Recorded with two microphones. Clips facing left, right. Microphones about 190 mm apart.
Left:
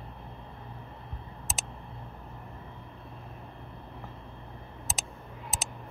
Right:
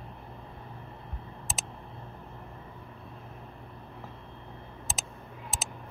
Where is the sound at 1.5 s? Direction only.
Centre (ahead or behind).